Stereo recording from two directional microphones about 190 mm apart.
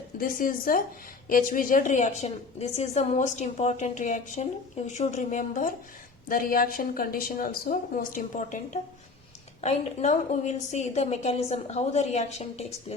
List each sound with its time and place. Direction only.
0.2 s a woman's voice: 50° left (ahead or behind)